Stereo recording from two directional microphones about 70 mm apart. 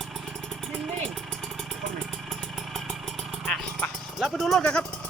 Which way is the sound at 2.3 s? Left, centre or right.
Centre.